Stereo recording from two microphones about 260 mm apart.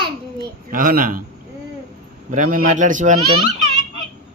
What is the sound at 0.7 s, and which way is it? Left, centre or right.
Speech, right.